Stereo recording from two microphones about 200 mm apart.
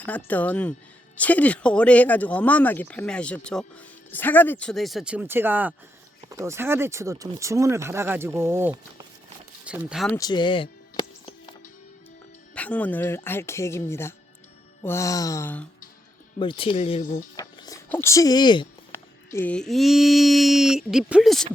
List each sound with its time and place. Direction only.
0.3 s speech: 10° left (ahead or behind); by 8.8 s 10° right (ahead or behind)
9.6 s a sound: 5° right (ahead or behind)
10.1 s music: 20° left (ahead or behind)
12.5 s speech: 5° left (ahead or behind)
16.4 s speech: 25° left (ahead or behind)
17.3 s music: 15° left (ahead or behind)
17.9 s speech: 15° left (ahead or behind)
18.9 s a sound: 10° left (ahead or behind)